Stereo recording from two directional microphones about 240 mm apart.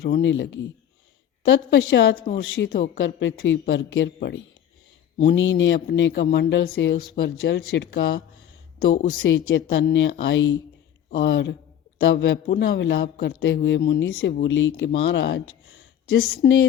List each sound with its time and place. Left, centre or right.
0.0 s speech: left
2.6 s speech: left
3.0 s speech: left
9.2 s speech: left